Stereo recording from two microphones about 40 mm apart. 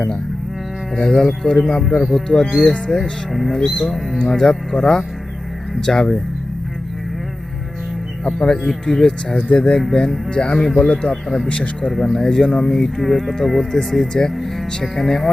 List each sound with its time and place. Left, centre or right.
1.0 s speech: centre
2.5 s speech: centre
8.2 s speech: centre
10.3 s speech: left
11.4 s speech: left
11.9 s speech: centre
12.1 s speech: centre